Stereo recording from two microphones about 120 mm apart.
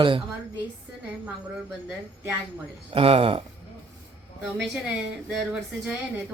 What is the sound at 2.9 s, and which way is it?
Speech, 50° right (ahead or behind).